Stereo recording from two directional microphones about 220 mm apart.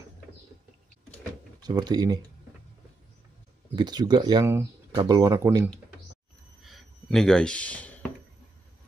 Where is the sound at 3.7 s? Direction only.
20° right (ahead or behind).